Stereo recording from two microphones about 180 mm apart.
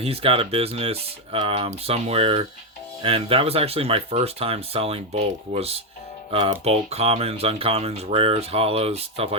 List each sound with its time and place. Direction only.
0.0 s speech: 30° right (ahead or behind)